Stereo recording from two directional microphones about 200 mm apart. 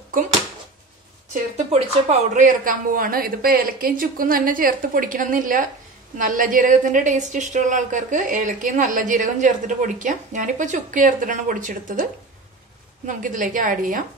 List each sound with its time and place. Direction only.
1.3 s a woman's voice: 30° right (ahead or behind)